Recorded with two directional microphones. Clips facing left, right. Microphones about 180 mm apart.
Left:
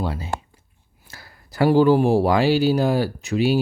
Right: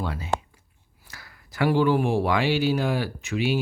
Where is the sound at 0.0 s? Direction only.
30° left (ahead or behind).